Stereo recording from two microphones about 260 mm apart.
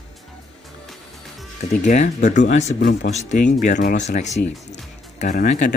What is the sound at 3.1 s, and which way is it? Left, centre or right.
Speech, left.